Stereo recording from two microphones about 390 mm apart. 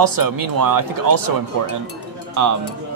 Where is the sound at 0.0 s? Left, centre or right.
Right.